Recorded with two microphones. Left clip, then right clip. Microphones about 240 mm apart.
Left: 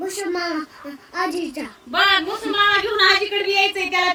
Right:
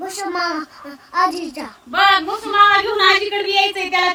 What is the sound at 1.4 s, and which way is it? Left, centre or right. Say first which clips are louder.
Child singing: right 1 dB; right.